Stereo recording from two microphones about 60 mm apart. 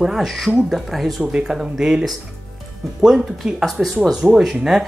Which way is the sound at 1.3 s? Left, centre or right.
Centre.